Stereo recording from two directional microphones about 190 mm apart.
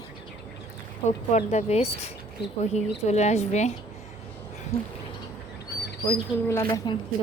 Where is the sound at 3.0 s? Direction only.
35° left (ahead or behind).